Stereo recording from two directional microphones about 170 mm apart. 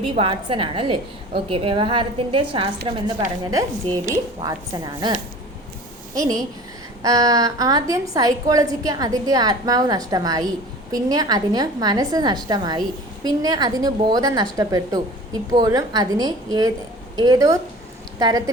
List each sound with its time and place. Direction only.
0.0 s a woman's voice: 30° right (ahead or behind)
3.4 s a woman's voice: 20° right (ahead or behind)
6.1 s a woman's voice: 20° right (ahead or behind)